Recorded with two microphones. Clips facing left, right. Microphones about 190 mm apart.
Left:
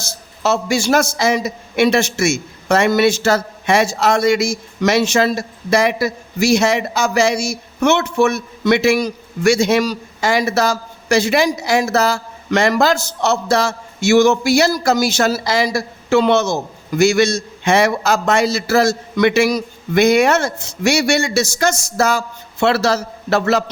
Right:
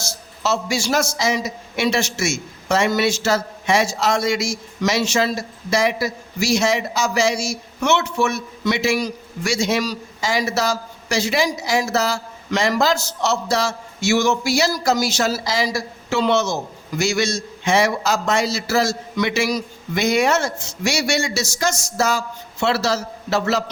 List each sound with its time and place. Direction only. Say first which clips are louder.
0.0 s a man's voice: left 5 dB; 55° left (ahead or behind)